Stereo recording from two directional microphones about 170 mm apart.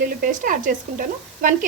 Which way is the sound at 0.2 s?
55° right (ahead or behind).